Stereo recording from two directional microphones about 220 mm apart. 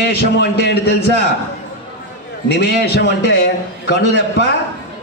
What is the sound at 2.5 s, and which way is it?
A man's voice, 50° left (ahead or behind).